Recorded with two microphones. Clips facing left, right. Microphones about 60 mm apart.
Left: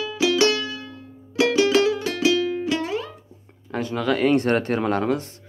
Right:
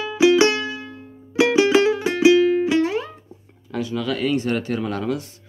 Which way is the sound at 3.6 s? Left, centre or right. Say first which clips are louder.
Left 1 dB; left.